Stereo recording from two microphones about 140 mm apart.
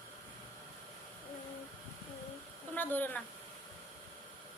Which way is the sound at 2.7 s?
15° left (ahead or behind).